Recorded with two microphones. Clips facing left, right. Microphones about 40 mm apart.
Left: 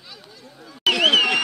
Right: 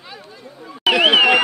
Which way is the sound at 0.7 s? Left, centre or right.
Right.